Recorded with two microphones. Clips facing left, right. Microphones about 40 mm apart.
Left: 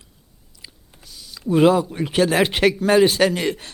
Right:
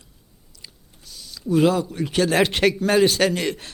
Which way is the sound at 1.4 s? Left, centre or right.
Left.